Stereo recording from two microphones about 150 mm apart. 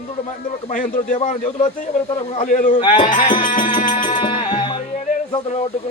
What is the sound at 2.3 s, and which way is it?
Speech, 60° left (ahead or behind).